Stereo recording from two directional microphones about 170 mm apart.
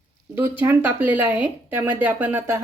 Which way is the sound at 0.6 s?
10° right (ahead or behind).